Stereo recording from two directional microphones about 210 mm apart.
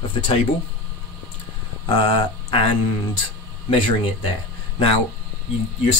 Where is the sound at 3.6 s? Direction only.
25° left (ahead or behind).